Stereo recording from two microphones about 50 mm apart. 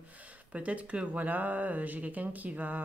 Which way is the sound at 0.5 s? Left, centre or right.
Right.